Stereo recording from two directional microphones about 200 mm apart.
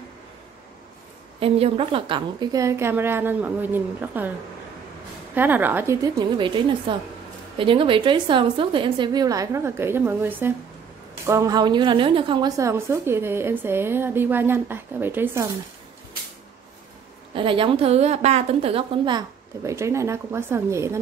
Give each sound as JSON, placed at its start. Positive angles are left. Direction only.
{"t": 1.4, "sound": "a woman's voice", "side_deg": -30}
{"t": 5.3, "sound": "a woman's voice", "side_deg": -10}
{"t": 17.3, "sound": "a woman's voice", "side_deg": -25}